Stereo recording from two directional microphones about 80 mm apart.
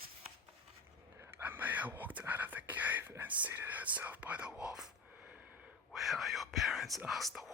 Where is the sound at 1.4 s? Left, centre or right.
Right.